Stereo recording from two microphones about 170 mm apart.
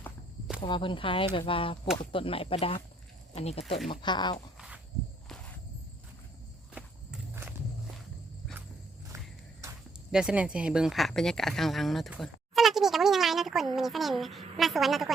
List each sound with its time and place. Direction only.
0.6 s speech: 30° left (ahead or behind)
4.5 s cricket: 5° right (ahead or behind)
6.7 s walk: 10° right (ahead or behind)
10.1 s speech: 5° right (ahead or behind)